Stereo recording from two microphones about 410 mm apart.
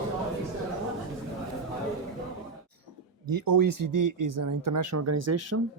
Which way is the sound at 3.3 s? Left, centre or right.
Right.